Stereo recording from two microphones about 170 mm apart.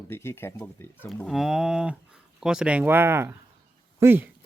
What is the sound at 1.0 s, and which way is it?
Speech, centre (ahead or behind).